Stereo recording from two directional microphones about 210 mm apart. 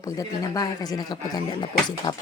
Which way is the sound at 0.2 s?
15° left (ahead or behind).